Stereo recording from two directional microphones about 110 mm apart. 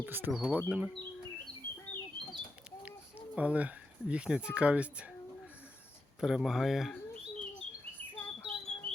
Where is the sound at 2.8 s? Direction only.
15° right (ahead or behind).